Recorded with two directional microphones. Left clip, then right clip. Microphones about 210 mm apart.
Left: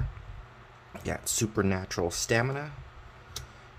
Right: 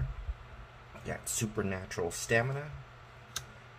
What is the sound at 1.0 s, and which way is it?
Speech, 50° left (ahead or behind).